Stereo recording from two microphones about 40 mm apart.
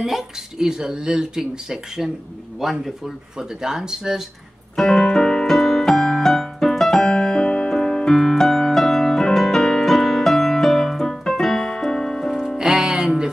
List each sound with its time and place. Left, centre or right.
0.0 s speech: centre
1.4 s speech: centre
3.3 s speech: centre
4.7 s piano: centre
7.7 s keyboard: centre
12.4 s music: centre